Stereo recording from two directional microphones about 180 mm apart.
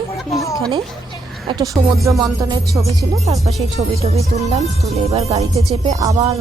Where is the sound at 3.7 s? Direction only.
35° right (ahead or behind).